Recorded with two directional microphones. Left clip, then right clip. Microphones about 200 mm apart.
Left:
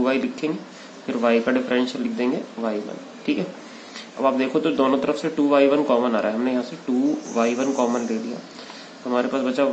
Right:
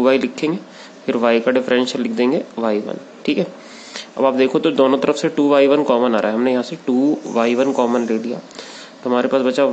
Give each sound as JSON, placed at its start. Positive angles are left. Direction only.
{"t": 0.0, "sound": "speech", "side_deg": -55}